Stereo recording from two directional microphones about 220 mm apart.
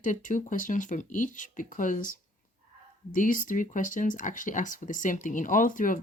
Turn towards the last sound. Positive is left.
turn(degrees=35)  # may be behind; listen again after turning